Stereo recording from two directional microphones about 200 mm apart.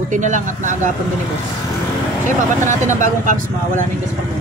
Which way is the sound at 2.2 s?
40° right (ahead or behind).